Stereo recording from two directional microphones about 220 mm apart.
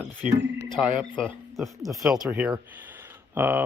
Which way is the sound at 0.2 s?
35° right (ahead or behind).